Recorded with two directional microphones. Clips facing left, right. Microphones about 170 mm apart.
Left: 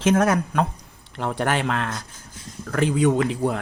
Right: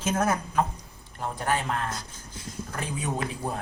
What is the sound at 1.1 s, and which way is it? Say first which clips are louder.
Speech: left 5 dB; 80° left.